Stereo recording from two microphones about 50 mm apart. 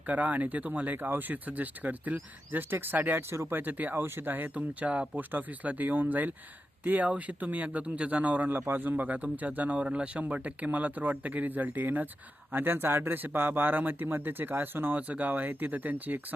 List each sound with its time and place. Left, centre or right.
0.1 s speech: right
3.2 s speech: right
3.9 s speech: right
4.5 s speech: right